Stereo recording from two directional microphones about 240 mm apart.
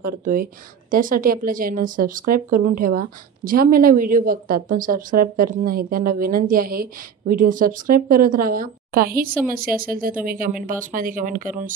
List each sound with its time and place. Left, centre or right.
0.0 s a woman's voice: right